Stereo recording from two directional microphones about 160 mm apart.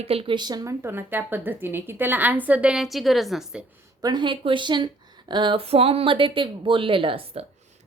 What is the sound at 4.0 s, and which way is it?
A woman's voice, 25° right (ahead or behind).